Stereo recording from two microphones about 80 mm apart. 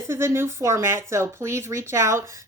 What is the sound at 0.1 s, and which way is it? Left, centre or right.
Speech, right.